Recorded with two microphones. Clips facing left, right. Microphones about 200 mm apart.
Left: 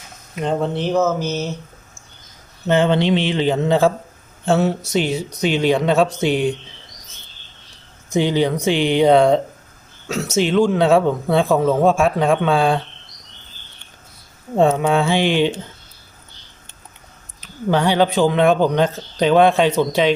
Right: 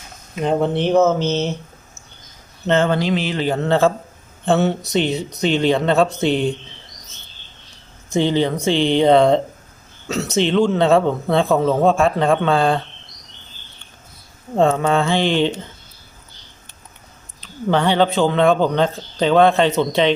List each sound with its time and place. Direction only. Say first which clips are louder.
0.4 s speech: right 3 dB; 20° right (ahead or behind)
2.6 s speech: left 1 dB; 15° left (ahead or behind)
3.5 s speech: right 1 dB; 15° left (ahead or behind)
8.1 s speech: even; 15° left (ahead or behind)
14.5 s speech: left 1 dB; 10° left (ahead or behind)
17.4 s speech: even; 15° left (ahead or behind)